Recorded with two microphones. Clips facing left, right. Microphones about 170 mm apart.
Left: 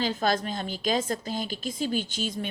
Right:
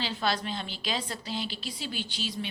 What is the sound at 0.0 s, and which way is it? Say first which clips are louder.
A woman's voice: left 4 dB; 45° left (ahead or behind).